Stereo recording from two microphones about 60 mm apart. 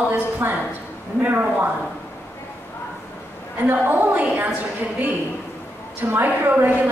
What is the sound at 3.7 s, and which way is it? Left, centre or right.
Speech, right.